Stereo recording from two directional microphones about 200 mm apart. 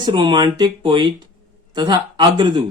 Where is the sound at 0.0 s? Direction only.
25° right (ahead or behind).